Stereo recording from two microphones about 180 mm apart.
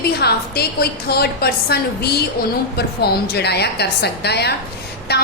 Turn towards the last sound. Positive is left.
turn(degrees=65)  # may be behind; listen again after turning